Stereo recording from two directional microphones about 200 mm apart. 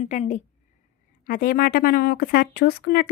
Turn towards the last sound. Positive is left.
turn(degrees=50)  # may be behind; listen again after turning